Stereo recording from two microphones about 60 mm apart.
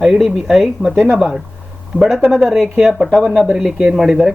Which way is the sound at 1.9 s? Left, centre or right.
Right.